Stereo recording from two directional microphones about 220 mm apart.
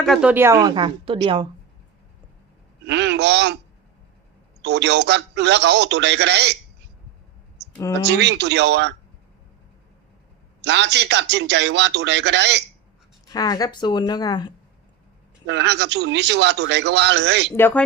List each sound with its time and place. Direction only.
0.0 s a woman's voice: centre (ahead or behind); by 1.5 s 25° right (ahead or behind)
2.8 s a man's voice: 50° right (ahead or behind)
4.6 s a man's voice: 50° right (ahead or behind)
7.7 s speech: 15° left (ahead or behind)
8.0 s a man's voice: 50° right (ahead or behind)
10.6 s a man's voice: 50° right (ahead or behind)
13.2 s speech: 15° left (ahead or behind)
15.4 s a man's voice: 50° right (ahead or behind)
17.5 s speech: 10° left (ahead or behind)